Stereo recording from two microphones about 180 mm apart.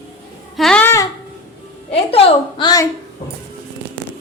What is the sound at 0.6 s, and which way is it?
Babbling, 5° left (ahead or behind).